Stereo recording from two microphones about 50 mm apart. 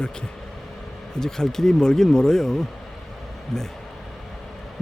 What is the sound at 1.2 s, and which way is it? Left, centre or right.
Speech, centre.